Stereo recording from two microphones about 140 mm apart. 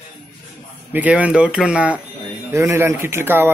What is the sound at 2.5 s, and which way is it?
Speech, 20° right (ahead or behind).